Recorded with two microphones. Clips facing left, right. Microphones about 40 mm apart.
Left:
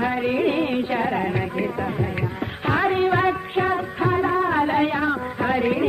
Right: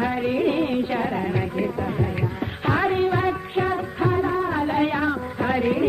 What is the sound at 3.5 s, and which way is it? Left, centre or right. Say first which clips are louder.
Music of bollywood: left 1 dB; centre.